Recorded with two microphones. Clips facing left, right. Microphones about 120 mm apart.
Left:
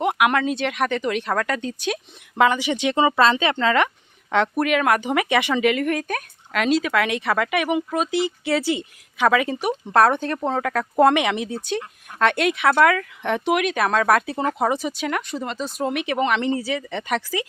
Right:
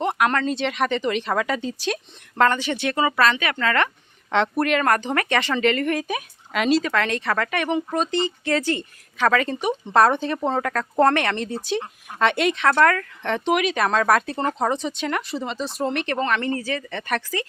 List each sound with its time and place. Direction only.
0.0 s speech: 10° left (ahead or behind)
4.3 s speech: centre (ahead or behind)